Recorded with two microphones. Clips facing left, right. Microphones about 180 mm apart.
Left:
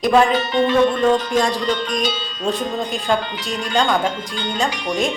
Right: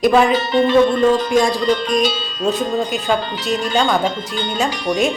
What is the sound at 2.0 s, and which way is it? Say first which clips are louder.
Speech: right 4 dB; 5° right (ahead or behind).